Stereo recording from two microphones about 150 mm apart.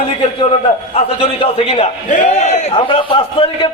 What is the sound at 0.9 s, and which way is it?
A man's voice, 40° left (ahead or behind).